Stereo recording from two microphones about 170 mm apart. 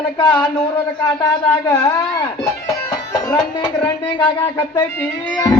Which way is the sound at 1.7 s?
10° left (ahead or behind).